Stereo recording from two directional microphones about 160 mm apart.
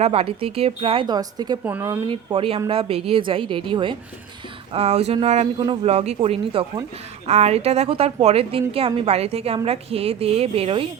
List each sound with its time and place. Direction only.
0.0 s a woman's voice: 40° right (ahead or behind)
1.0 s speech: 25° right (ahead or behind)
1.6 s speech: 10° right (ahead or behind)
2.0 s a woman's voice: 35° right (ahead or behind)
5.5 s speech: 30° right (ahead or behind)
5.8 s a woman's voice: 40° right (ahead or behind)